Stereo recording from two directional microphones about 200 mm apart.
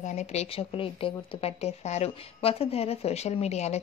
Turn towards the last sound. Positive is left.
turn(degrees=35)  # may be behind; listen again after turning